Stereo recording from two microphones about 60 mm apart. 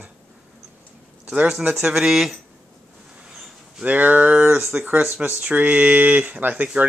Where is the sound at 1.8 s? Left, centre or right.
Centre.